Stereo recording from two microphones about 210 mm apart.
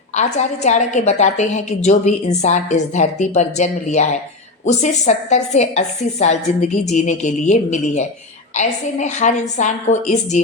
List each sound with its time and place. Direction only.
0.2 s a woman's voice: 35° left (ahead or behind)